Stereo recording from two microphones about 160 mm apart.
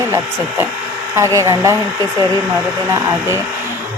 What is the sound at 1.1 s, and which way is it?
Speech, 20° right (ahead or behind).